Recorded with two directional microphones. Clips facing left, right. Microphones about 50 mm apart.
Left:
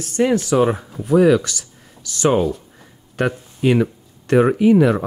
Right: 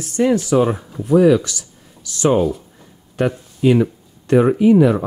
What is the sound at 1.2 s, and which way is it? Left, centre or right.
Speech, left.